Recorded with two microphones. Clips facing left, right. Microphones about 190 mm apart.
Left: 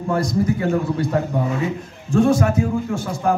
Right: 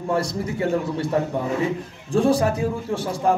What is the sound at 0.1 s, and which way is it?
A man's voice, 30° right (ahead or behind).